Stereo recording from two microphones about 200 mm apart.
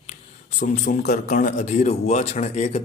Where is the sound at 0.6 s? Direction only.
40° left (ahead or behind).